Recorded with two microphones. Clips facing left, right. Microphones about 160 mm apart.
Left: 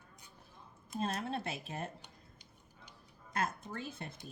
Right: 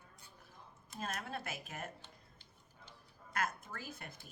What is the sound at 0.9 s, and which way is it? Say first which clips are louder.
Speech: left 6 dB; 30° left (ahead or behind).